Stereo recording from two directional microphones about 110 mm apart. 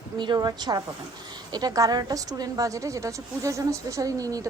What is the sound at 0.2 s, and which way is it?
A woman's voice, 40° right (ahead or behind).